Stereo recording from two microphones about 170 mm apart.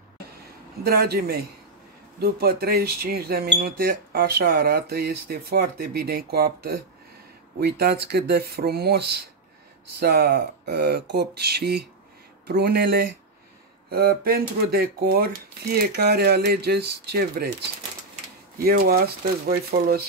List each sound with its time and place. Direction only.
0.8 s speech: 65° right (ahead or behind)
18.6 s speech: 60° right (ahead or behind)